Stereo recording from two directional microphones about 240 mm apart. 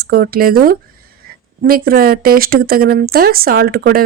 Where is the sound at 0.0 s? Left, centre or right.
Right.